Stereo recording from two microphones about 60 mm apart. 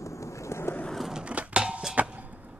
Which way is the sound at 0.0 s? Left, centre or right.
Left.